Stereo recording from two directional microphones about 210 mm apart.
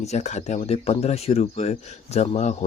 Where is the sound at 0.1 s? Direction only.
35° left (ahead or behind).